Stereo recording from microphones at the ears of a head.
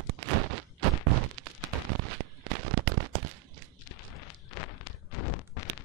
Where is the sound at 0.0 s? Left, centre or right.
Right.